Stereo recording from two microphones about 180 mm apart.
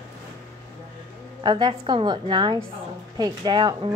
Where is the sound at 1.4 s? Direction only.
25° right (ahead or behind).